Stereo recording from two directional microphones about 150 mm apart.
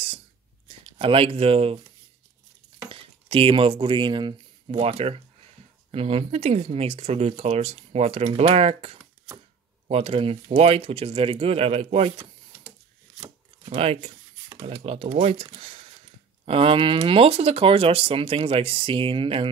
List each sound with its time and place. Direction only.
0.7 s speech: 35° right (ahead or behind)
2.9 s speech: 35° right (ahead or behind)
13.7 s speech: 40° right (ahead or behind)